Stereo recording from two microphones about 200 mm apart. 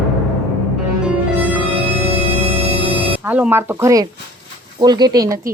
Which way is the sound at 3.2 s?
10° right (ahead or behind).